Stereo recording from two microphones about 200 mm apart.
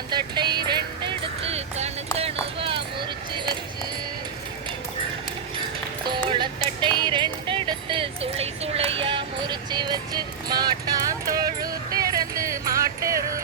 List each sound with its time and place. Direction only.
0.1 s music: 20° right (ahead or behind)
2.1 s clip-clop: 30° right (ahead or behind)
6.1 s music: 25° right (ahead or behind)